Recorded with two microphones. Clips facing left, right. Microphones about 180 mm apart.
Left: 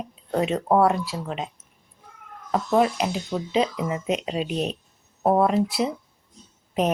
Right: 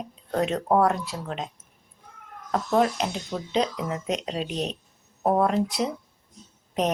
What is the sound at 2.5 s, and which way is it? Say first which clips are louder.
Speech: left 2 dB; 5° left (ahead or behind).